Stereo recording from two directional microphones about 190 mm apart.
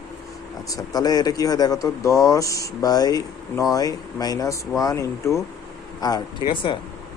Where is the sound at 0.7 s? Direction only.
20° left (ahead or behind).